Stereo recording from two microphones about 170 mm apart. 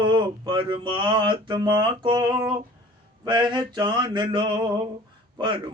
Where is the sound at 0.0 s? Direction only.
30° right (ahead or behind).